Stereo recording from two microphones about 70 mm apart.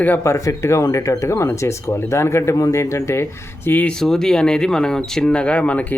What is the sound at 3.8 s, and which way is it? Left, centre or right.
Speech, centre.